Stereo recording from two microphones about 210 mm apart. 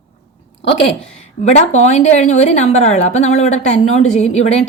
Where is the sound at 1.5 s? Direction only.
35° left (ahead or behind).